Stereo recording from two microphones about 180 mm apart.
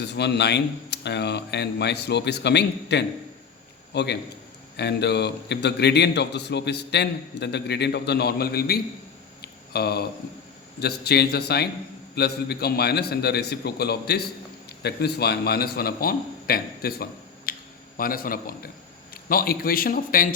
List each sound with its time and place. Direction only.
0.0 s a man's voice: 70° left (ahead or behind)
9.4 s a sound: 60° left (ahead or behind)
10.8 s a man's voice: 60° left (ahead or behind)